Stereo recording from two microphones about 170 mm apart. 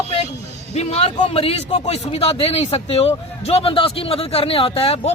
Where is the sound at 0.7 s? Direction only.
35° left (ahead or behind).